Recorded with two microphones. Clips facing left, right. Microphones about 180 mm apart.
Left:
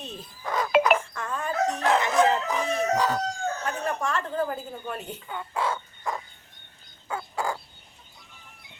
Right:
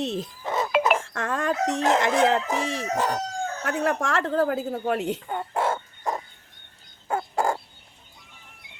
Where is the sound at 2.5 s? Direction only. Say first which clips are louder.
Even; 90° right.